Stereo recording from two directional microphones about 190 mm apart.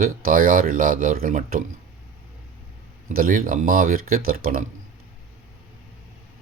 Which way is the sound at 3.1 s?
50° right (ahead or behind).